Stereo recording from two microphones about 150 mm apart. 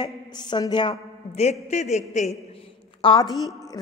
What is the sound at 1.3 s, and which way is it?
A man's voice, 45° left (ahead or behind).